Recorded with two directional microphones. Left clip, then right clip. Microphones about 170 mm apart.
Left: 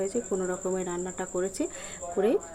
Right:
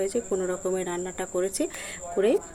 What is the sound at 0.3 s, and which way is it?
Speech, centre (ahead or behind).